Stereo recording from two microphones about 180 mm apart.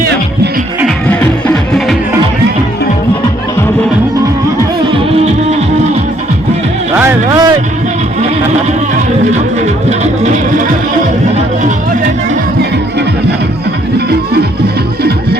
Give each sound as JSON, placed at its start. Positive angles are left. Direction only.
{"t": 1.0, "sound": "music", "side_deg": 10}
{"t": 7.0, "sound": "music", "side_deg": -20}
{"t": 9.6, "sound": "music", "side_deg": -40}